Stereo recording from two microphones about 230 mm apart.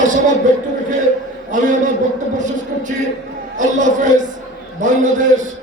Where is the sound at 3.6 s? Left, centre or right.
Right.